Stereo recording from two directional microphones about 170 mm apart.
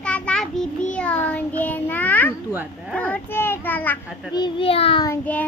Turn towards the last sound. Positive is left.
turn(degrees=10)  # may be behind; listen again after turning